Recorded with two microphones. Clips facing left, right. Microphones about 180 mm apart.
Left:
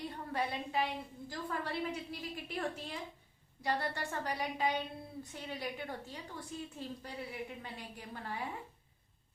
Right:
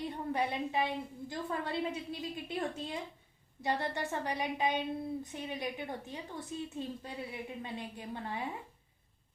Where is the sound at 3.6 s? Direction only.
20° right (ahead or behind).